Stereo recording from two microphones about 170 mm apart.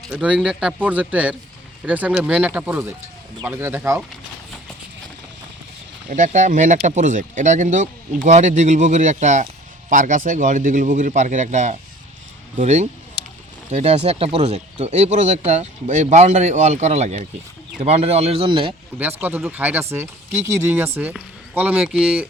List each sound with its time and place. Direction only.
0.1 s speech: 5° right (ahead or behind)
6.1 s speech: 45° right (ahead or behind); by 18.7 s 30° right (ahead or behind)
18.9 s speech: 10° right (ahead or behind)